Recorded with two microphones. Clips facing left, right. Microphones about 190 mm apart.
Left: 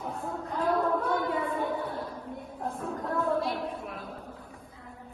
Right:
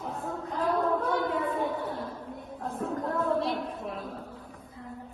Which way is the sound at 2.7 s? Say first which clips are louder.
Right 3 dB; centre (ahead or behind).